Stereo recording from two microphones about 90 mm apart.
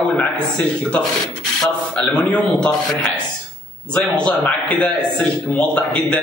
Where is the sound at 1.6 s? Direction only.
10° left (ahead or behind).